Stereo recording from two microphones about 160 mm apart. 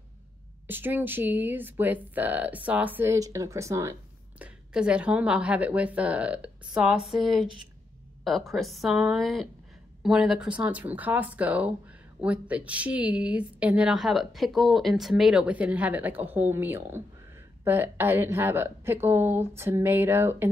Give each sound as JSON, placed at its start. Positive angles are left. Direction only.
{"t": 0.7, "sound": "speech", "side_deg": -10}
{"t": 4.4, "sound": "a woman's voice", "side_deg": -5}